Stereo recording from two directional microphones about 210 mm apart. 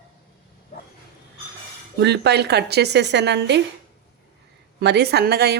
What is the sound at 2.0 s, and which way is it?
A woman's voice, 55° right (ahead or behind).